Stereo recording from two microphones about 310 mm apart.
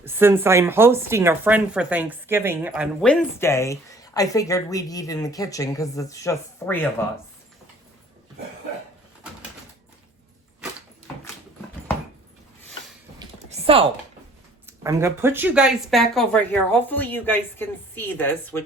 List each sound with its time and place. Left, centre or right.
0.0 s speech: centre
13.1 s typing: centre
14.7 s speech: centre